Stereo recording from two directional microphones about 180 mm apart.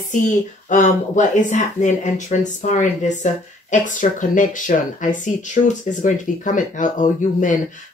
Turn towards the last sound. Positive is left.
turn(degrees=45)  # may be behind; listen again after turning